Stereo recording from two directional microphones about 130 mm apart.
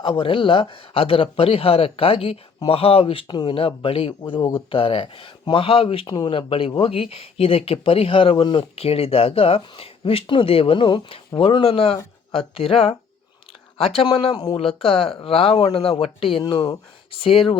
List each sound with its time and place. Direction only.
0.0 s speech: 45° left (ahead or behind)
4.4 s speech: 30° left (ahead or behind)
4.7 s speech: 45° left (ahead or behind)
16.4 s speech: 30° left (ahead or behind)